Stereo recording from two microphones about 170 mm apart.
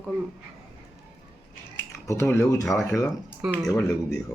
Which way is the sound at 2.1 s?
15° left (ahead or behind).